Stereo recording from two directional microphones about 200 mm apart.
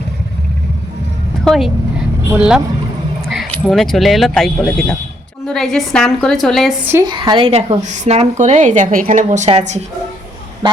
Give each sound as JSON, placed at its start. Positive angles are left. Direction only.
{"t": 1.5, "sound": "speech", "side_deg": 0}
{"t": 6.8, "sound": "a woman's voice", "side_deg": -15}
{"t": 10.6, "sound": "speech", "side_deg": -20}